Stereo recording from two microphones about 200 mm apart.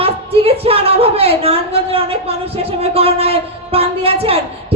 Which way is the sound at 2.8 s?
30° right (ahead or behind).